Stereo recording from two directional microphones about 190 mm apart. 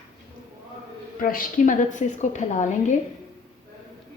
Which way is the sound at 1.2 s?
50° left (ahead or behind).